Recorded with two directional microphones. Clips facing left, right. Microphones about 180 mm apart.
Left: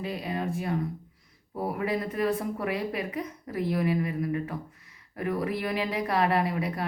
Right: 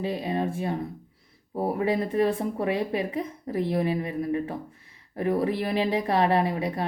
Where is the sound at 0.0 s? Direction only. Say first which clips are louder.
Right 4 dB; 25° right (ahead or behind).